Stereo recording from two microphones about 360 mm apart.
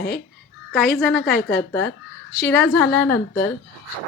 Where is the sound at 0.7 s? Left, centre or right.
Centre.